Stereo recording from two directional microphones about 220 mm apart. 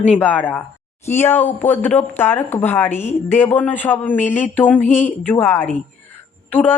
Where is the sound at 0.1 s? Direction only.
5° left (ahead or behind).